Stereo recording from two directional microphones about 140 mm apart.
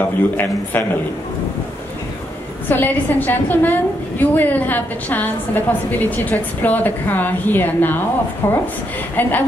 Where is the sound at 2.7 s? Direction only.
15° left (ahead or behind).